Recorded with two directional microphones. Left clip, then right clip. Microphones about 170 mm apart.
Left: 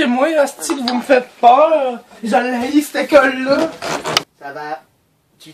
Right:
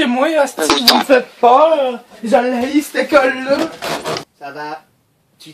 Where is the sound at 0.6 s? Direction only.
35° right (ahead or behind).